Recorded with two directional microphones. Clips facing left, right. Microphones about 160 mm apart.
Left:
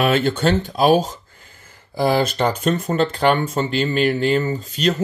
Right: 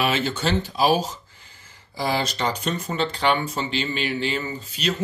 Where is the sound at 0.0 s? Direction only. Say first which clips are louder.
Left 6 dB; 50° left (ahead or behind).